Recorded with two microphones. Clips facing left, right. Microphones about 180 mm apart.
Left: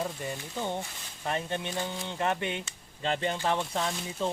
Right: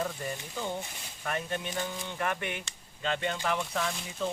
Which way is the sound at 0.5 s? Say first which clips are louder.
Left 2 dB; 20° left (ahead or behind).